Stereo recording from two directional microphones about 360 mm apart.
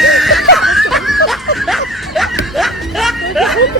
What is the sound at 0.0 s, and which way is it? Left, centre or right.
Snicker, centre.